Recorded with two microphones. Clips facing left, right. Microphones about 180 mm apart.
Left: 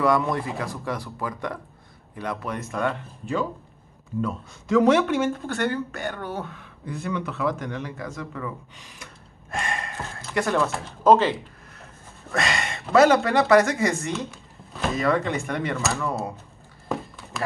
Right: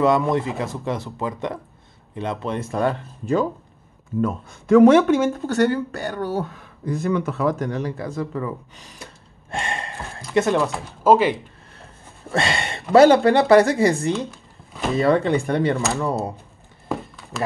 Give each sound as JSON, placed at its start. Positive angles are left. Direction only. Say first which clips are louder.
{"t": 0.0, "sound": "speech", "louder": "right 4 dB", "side_deg": -20}
{"t": 4.2, "sound": "speech", "louder": "right 5 dB", "side_deg": -55}
{"t": 10.7, "sound": "speech", "louder": "right 1 dB", "side_deg": -10}
{"t": 12.3, "sound": "a sound", "louder": "right 3 dB", "side_deg": -30}
{"t": 12.9, "sound": "speech", "louder": "right 5 dB", "side_deg": -30}